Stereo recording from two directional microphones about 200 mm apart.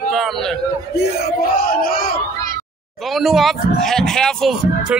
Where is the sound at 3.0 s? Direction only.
Centre (ahead or behind).